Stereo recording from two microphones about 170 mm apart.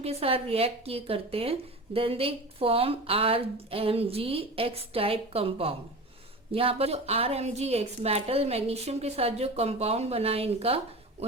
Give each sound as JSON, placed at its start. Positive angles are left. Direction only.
{"t": 0.0, "sound": "a woman's voice", "side_deg": -35}